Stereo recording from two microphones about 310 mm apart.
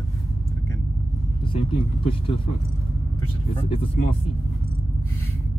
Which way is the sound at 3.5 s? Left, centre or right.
Centre.